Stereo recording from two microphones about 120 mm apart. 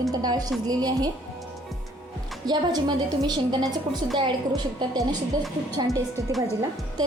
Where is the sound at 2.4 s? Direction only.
35° right (ahead or behind).